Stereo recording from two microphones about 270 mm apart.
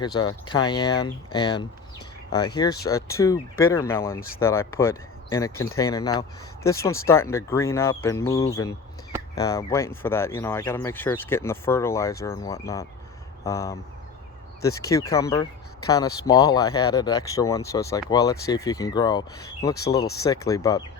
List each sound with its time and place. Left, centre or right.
0.0 s speech: centre